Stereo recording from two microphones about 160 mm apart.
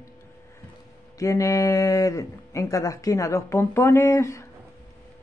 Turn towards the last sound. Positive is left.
turn(degrees=20)  # may be behind; listen again after turning